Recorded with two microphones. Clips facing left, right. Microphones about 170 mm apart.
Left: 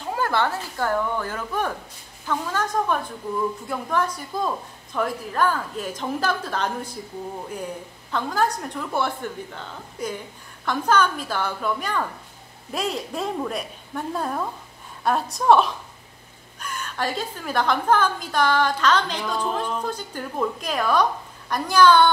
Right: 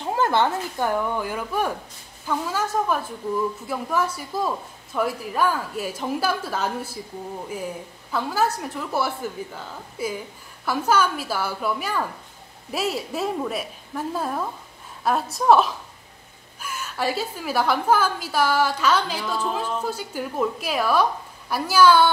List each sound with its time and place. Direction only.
0.1 s a woman's voice: 20° right (ahead or behind)
8.1 s a woman's voice: 5° right (ahead or behind)